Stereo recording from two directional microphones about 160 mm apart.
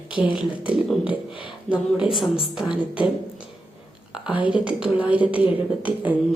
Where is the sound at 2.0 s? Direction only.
Centre (ahead or behind).